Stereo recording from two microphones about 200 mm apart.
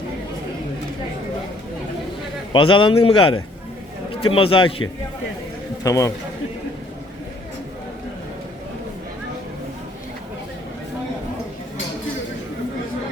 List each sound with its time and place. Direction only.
2.5 s a man's voice: 25° left (ahead or behind)